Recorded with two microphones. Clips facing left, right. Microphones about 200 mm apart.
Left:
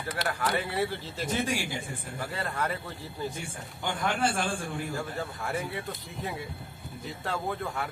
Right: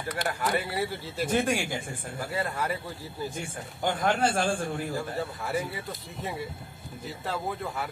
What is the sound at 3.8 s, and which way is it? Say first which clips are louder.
Speech: right 3 dB; 45° right (ahead or behind).